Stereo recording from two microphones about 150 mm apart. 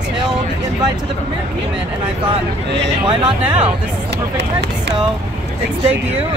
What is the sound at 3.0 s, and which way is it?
Speech, 30° right (ahead or behind).